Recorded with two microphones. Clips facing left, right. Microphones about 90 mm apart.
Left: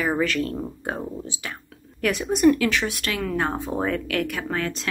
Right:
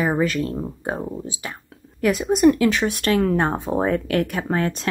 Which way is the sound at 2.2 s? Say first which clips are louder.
Right 2 dB; 25° right (ahead or behind).